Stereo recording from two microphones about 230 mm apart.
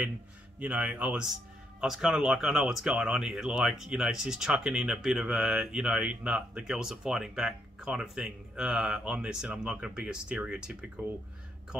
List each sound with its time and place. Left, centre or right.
0.6 s speech: centre